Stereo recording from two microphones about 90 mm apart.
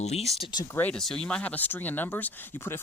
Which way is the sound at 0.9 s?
5° left (ahead or behind).